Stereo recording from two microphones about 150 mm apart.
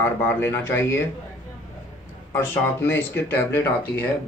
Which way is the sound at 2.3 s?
15° left (ahead or behind).